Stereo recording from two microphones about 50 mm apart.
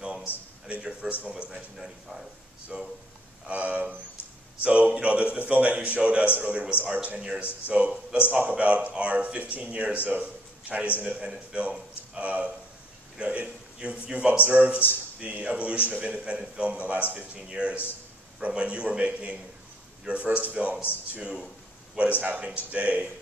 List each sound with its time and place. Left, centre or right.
0.7 s a man's voice: right
2.7 s a man's voice: right
21.9 s a man's voice: right